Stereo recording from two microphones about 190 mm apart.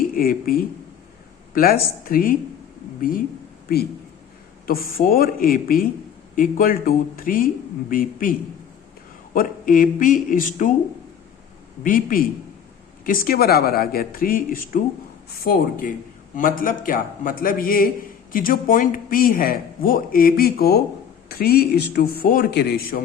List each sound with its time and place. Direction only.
0.0 s a man's voice: 50° left (ahead or behind)
4.6 s a man's voice: 50° left (ahead or behind)
11.8 s a man's voice: 45° left (ahead or behind)